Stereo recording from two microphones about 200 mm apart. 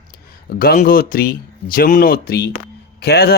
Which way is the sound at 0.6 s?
45° left (ahead or behind).